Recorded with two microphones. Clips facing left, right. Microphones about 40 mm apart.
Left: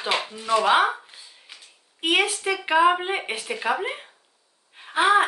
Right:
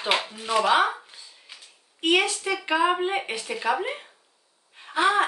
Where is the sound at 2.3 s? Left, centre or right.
Left.